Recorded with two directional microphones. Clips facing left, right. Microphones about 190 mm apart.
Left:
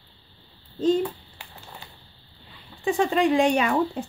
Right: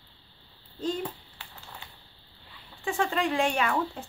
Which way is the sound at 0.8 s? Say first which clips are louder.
Left 9 dB; 20° left (ahead or behind).